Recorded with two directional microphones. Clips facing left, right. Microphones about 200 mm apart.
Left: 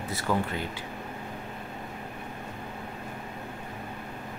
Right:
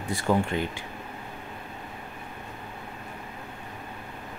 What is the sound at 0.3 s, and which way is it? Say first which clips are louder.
Speech: right 4 dB; 25° right (ahead or behind).